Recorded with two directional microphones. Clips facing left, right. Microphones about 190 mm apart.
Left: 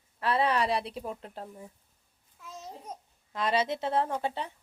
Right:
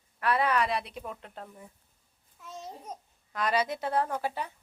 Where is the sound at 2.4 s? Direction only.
10° left (ahead or behind).